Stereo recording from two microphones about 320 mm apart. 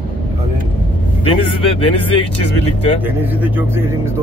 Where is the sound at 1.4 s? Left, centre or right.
Centre.